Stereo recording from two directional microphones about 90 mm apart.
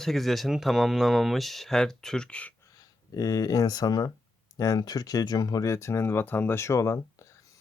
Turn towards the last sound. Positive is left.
turn(degrees=35)  # may be behind; listen again after turning